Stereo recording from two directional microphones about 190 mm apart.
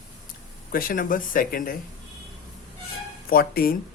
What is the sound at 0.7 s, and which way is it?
Speech, 50° left (ahead or behind).